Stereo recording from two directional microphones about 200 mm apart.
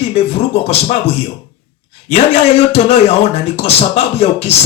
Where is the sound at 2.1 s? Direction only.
30° left (ahead or behind).